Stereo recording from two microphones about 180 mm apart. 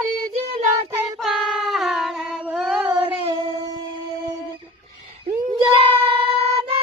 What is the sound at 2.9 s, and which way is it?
Female singing, 10° right (ahead or behind).